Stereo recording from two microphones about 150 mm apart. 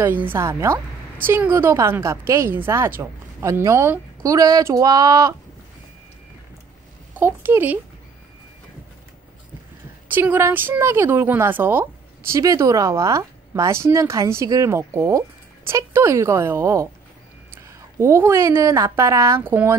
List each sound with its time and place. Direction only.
0.0 s a woman's voice: 15° right (ahead or behind)
7.2 s speech: 15° right (ahead or behind)
10.0 s speech: 15° right (ahead or behind)
17.9 s a woman's voice: 20° right (ahead or behind)